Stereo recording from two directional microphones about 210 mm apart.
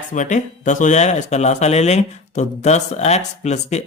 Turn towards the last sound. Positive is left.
turn(degrees=35)  # may be behind; listen again after turning